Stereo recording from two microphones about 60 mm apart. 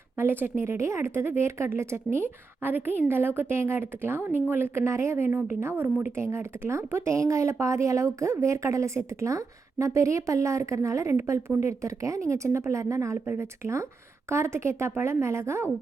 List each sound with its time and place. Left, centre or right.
0.2 s a woman's voice: right
13.2 s a woman's voice: right